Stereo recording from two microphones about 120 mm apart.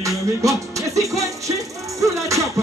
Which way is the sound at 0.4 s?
25° right (ahead or behind).